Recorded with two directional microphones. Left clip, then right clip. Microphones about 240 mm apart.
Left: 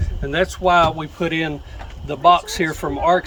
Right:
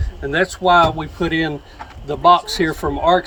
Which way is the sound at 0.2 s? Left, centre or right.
Centre.